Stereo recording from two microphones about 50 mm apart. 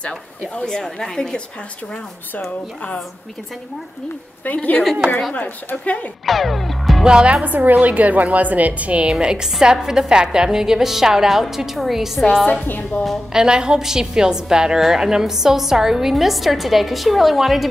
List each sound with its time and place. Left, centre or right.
0.4 s a woman's voice: centre
4.6 s speech: left
6.2 s music: centre
7.1 s a woman's voice: centre
7.4 s a woman's voice: right; by 12.3 s centre
12.4 s a woman's voice: left
13.3 s a woman's voice: centre